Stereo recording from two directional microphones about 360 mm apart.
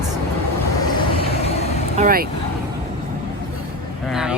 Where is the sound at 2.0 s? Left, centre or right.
Right.